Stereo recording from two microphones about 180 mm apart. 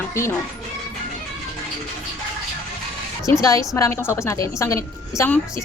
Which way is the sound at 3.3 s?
20° left (ahead or behind).